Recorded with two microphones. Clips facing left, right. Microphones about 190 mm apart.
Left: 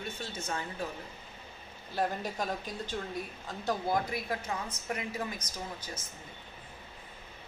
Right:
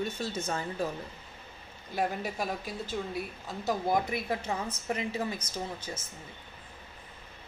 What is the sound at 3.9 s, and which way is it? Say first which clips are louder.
A woman's voice: right 4 dB; 25° right (ahead or behind).